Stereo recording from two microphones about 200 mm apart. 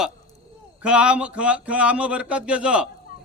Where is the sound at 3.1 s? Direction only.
45° left (ahead or behind).